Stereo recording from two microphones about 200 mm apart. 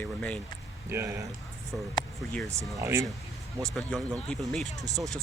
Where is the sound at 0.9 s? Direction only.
15° right (ahead or behind).